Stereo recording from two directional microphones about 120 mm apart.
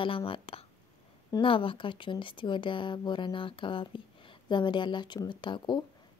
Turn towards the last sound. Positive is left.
turn(degrees=35)  # may be behind; listen again after turning